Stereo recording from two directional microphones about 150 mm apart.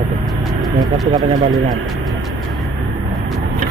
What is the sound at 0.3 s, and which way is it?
Vehicle, centre (ahead or behind).